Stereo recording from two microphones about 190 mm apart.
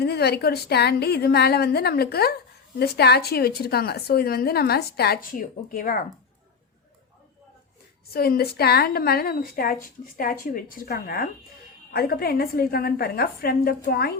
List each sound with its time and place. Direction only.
0.0 s a woman's voice: 60° left (ahead or behind)
8.1 s a woman's voice: 55° left (ahead or behind)